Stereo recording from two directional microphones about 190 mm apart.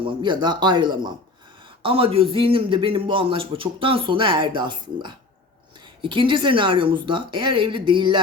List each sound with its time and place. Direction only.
0.0 s a man's voice: 25° right (ahead or behind)